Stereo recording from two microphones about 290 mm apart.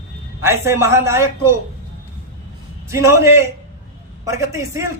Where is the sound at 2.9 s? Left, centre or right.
Centre.